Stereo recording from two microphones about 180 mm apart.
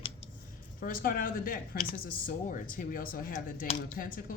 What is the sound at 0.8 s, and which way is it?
A woman's voice, 50° left (ahead or behind).